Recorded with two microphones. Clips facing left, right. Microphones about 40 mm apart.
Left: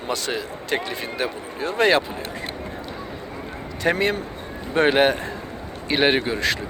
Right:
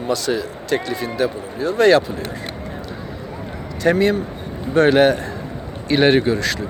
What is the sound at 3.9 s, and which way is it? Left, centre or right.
Speech, left.